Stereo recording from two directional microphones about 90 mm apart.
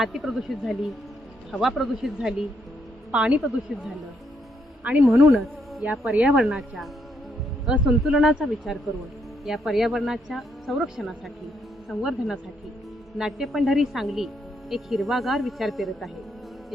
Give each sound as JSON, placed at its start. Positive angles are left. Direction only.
{"t": 0.0, "sound": "speech", "side_deg": 0}
{"t": 4.8, "sound": "speech", "side_deg": -15}
{"t": 5.3, "sound": "speech", "side_deg": 0}
{"t": 6.1, "sound": "speech", "side_deg": -10}